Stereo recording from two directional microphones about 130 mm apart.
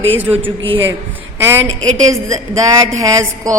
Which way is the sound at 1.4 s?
20° right (ahead or behind).